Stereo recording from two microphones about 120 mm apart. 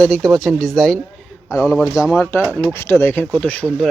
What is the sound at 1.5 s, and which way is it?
A man's voice, 20° left (ahead or behind).